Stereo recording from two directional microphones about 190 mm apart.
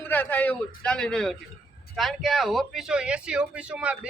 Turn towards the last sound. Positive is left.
turn(degrees=-5)  # may be behind; listen again after turning